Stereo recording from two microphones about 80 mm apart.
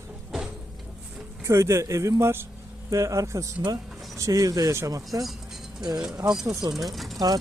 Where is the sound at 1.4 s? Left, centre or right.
Right.